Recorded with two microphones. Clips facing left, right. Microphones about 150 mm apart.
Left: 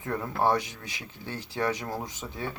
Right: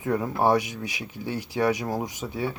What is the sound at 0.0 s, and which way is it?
Speech, 15° right (ahead or behind).